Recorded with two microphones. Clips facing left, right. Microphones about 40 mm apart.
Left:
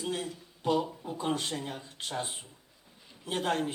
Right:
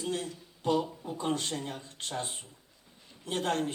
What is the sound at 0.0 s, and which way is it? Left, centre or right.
Speech, centre.